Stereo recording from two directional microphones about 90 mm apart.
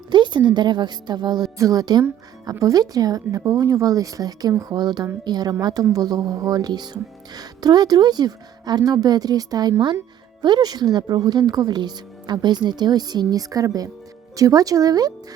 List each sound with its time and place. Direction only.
0.1 s speech: 60° right (ahead or behind)
1.5 s speech: 40° right (ahead or behind)